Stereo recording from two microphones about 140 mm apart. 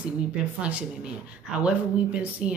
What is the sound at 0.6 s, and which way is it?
Speech, 10° right (ahead or behind).